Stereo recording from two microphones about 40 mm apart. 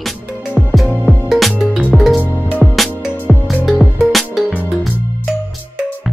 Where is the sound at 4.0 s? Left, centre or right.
Centre.